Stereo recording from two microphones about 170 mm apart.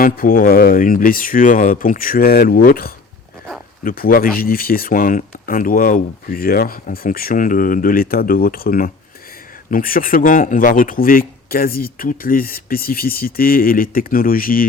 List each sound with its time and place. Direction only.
0.0 s speech: 55° left (ahead or behind)